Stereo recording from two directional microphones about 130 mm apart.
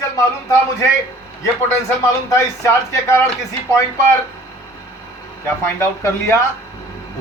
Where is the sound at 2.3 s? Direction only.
20° left (ahead or behind).